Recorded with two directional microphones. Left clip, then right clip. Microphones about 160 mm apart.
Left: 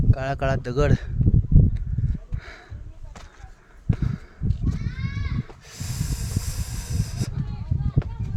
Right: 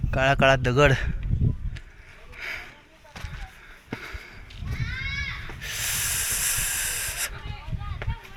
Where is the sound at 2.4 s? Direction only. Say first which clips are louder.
Right 13 dB; 30° left (ahead or behind).